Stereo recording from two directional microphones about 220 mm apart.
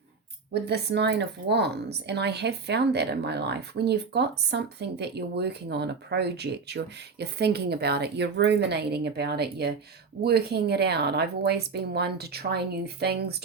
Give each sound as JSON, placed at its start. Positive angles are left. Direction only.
{"t": 0.5, "sound": "speech", "side_deg": -50}